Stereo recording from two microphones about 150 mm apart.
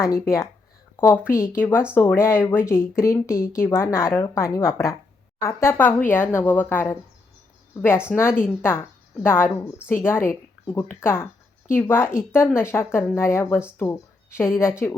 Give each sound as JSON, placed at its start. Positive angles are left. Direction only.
{"t": 0.9, "sound": "a woman's voice", "side_deg": 15}